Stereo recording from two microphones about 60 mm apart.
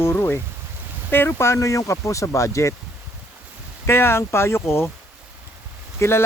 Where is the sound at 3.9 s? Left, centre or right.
Left.